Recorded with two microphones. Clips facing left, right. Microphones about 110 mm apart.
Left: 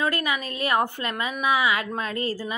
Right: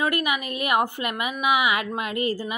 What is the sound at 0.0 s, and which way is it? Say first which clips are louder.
Speech: right 1 dB; 20° right (ahead or behind).